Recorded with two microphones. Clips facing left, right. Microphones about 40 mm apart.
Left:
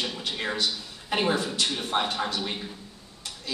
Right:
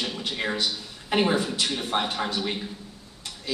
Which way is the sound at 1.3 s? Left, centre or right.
Centre.